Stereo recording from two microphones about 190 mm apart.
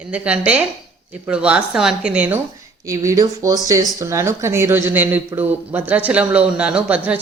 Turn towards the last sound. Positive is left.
turn(degrees=-5)  # may be behind; listen again after turning